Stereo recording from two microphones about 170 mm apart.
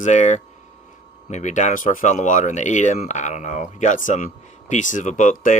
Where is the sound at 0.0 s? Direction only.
45° left (ahead or behind).